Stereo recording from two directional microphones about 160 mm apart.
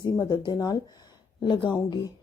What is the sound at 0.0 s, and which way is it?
A woman's voice, 25° left (ahead or behind).